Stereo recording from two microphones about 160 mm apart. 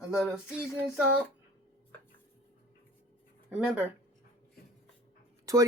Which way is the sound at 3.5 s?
5° right (ahead or behind).